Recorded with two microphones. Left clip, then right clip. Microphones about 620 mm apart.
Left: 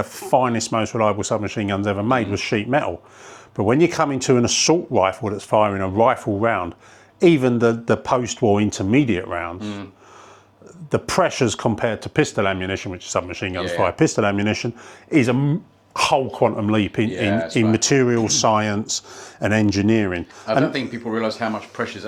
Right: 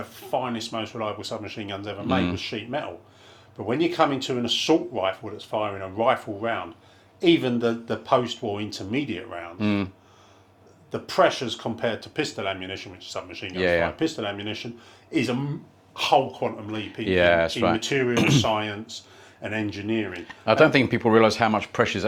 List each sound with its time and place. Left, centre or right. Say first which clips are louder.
0.3 s speech: left 9 dB; left
4.7 s speech: left 5 dB; left
9.6 s speech: right 6 dB; right
10.9 s speech: left 2 dB; left
13.6 s speech: right 1 dB; right
14.0 s speech: left 9 dB; left
16.0 s speech: left 4 dB; left
17.1 s speech: right 3 dB; right
17.7 s speech: left 5 dB; left
20.4 s speech: right 3 dB; right